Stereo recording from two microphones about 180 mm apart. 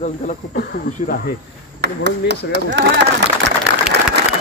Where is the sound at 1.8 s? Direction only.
70° right (ahead or behind).